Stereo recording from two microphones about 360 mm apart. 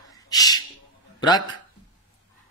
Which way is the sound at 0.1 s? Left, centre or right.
Centre.